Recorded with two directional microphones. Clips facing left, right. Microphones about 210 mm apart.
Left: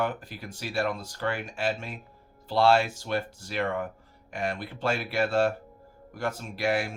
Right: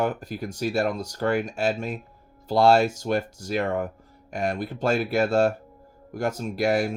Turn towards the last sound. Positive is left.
turn(degrees=-40)  # may be behind; listen again after turning